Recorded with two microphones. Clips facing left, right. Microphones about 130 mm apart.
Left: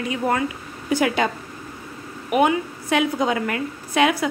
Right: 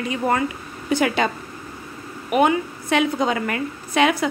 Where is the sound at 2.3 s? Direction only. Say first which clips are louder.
Right 1 dB; 10° left (ahead or behind).